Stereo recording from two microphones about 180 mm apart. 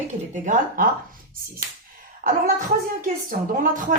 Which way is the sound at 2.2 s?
50° right (ahead or behind).